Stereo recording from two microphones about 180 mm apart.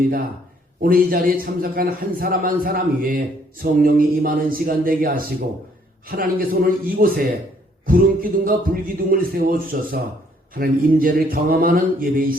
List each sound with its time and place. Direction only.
0.8 s a man's voice: 55° right (ahead or behind)